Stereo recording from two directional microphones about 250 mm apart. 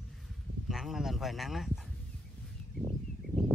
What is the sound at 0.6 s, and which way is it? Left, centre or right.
Speech, centre.